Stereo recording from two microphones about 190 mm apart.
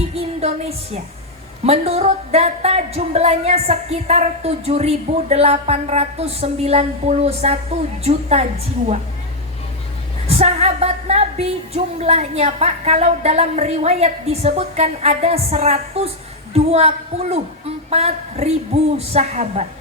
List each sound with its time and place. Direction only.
0.2 s music: 35° right (ahead or behind)
1.6 s a woman's voice: 35° right (ahead or behind)
10.2 s a woman's voice: 35° right (ahead or behind)